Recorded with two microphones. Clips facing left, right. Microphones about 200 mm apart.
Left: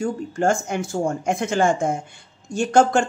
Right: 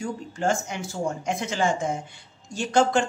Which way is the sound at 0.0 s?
50° left (ahead or behind).